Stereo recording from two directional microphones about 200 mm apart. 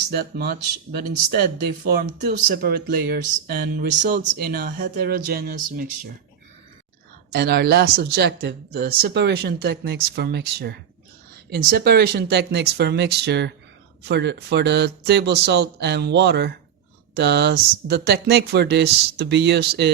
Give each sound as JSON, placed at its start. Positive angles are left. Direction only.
{"t": 0.3, "sound": "speech", "side_deg": -50}
{"t": 7.3, "sound": "speech", "side_deg": -50}